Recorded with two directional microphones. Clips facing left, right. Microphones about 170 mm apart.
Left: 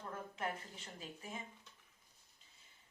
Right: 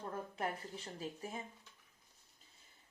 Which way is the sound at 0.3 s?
35° right (ahead or behind).